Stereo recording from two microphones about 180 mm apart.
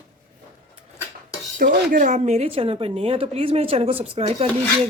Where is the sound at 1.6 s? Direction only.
50° right (ahead or behind).